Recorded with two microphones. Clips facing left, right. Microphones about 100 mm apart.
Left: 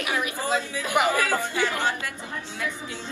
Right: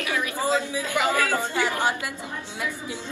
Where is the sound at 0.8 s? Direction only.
20° left (ahead or behind).